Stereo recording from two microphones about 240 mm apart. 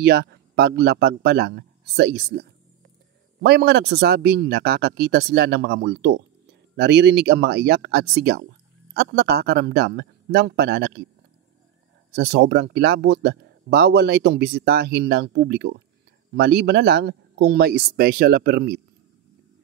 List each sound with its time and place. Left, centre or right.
0.0 s speech: right
12.2 s speech: right